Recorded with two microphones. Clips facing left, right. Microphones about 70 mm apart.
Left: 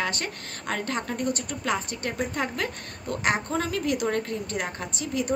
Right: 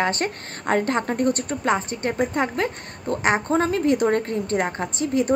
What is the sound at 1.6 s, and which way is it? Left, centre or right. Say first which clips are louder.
A woman's voice: right 6 dB; right.